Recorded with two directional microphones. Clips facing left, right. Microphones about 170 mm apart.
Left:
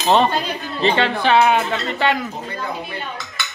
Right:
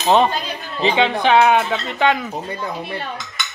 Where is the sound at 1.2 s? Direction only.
5° left (ahead or behind).